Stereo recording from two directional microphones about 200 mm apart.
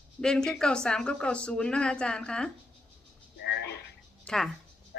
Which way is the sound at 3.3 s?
55° left (ahead or behind).